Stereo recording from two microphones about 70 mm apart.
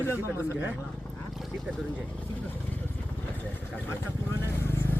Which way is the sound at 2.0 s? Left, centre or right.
Left.